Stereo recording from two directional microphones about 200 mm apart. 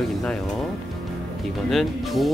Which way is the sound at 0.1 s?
Centre (ahead or behind).